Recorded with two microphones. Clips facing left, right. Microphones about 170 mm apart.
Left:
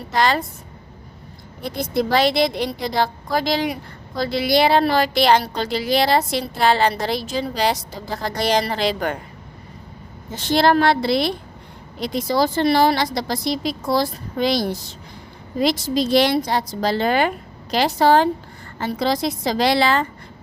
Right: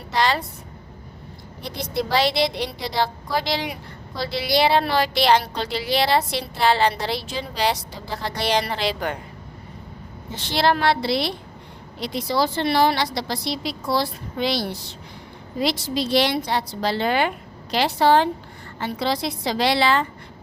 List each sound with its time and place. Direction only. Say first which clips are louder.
0.1 s a woman's voice: left 2 dB; 50° left (ahead or behind)
1.6 s a woman's voice: left 5 dB; 50° left (ahead or behind)
10.3 s a woman's voice: left 5 dB; 45° left (ahead or behind)